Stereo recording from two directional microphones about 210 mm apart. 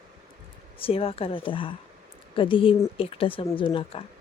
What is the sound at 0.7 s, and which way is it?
Speech, 25° left (ahead or behind).